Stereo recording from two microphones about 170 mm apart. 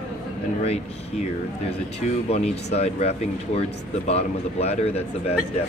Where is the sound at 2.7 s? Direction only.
40° left (ahead or behind).